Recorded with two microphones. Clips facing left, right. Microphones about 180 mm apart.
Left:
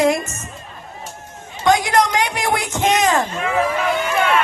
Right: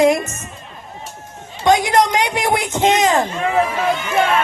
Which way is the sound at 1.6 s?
20° right (ahead or behind).